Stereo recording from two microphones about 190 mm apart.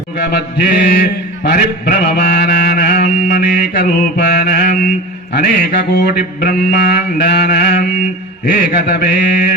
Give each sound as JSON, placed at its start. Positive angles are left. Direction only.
{"t": 0.2, "sound": "mantra", "side_deg": 55}